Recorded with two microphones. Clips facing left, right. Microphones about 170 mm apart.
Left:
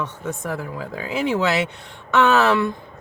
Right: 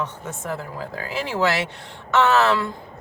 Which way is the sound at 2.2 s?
15° left (ahead or behind).